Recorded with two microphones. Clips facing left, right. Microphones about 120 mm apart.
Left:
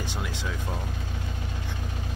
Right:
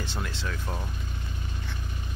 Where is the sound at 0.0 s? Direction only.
15° left (ahead or behind).